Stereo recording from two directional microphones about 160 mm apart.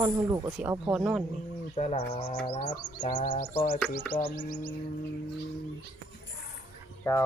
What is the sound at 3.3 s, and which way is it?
Music, 70° left (ahead or behind).